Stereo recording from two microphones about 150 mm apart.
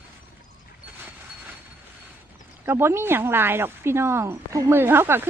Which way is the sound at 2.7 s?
15° right (ahead or behind).